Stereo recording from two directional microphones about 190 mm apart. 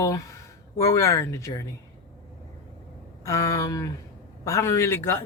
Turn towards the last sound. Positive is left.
turn(degrees=10)  # may be behind; listen again after turning